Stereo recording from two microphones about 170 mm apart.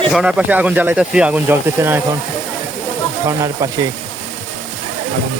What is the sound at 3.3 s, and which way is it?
Speech, 20° right (ahead or behind).